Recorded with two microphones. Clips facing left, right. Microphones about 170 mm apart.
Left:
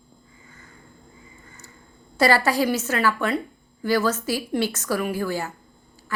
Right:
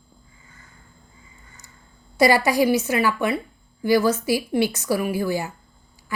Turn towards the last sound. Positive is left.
turn(degrees=-10)  # may be behind; listen again after turning